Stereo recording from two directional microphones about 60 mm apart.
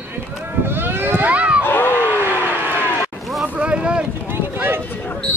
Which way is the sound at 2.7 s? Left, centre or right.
Left.